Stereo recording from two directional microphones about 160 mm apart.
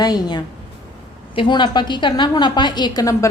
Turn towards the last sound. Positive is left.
turn(degrees=20)  # may be behind; listen again after turning